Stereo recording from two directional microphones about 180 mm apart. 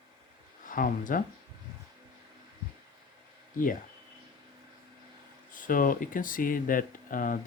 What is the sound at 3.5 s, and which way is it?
Speech, 50° left (ahead or behind).